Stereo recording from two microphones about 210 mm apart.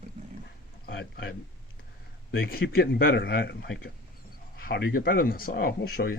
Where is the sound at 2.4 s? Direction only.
45° left (ahead or behind).